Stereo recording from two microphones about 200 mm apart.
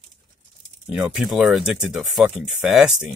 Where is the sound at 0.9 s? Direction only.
5° right (ahead or behind).